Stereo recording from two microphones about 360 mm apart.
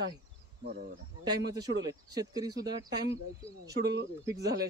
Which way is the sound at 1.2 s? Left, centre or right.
Centre.